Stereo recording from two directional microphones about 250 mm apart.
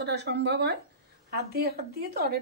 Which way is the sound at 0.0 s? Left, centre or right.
Right.